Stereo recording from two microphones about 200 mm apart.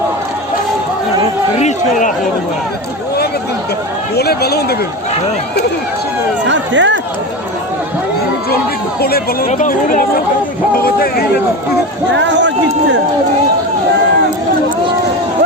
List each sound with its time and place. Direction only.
1.5 s a man's voice: 35° left (ahead or behind)
4.1 s speech: 50° left (ahead or behind)
6.5 s speech: 65° right (ahead or behind)
9.0 s speech: 50° left (ahead or behind)
12.1 s speech: 65° right (ahead or behind)